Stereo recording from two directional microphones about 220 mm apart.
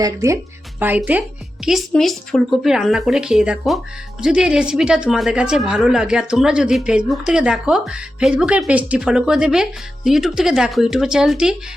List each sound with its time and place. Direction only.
0.0 s speech: 15° right (ahead or behind)